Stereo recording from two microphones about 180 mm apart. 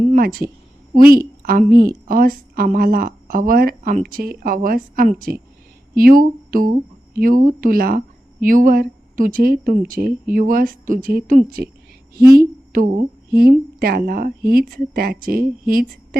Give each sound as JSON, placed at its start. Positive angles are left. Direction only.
{"t": 0.1, "sound": "a woman's voice", "side_deg": -55}